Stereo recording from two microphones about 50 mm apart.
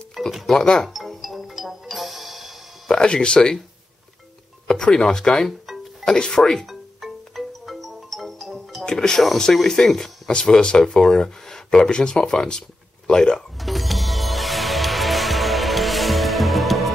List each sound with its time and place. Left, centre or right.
0.2 s music: centre
0.5 s speech: centre
0.8 s music: centre
2.9 s speech: centre
4.6 s speech: centre
6.6 s music: centre
8.8 s speech: centre
13.6 s music: centre